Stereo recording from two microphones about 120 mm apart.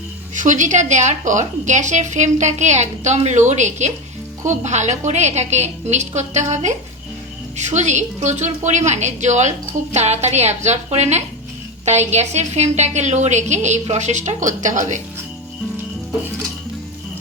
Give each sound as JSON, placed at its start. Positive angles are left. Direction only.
{"t": 0.3, "sound": "a woman's voice", "side_deg": -90}